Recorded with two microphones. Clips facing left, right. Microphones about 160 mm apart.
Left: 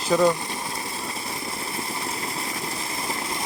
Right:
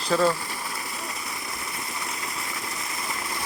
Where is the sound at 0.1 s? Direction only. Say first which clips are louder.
Left 3 dB; 15° left (ahead or behind).